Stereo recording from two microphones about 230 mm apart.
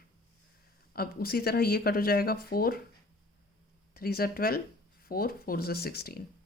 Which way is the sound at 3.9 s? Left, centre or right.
Left.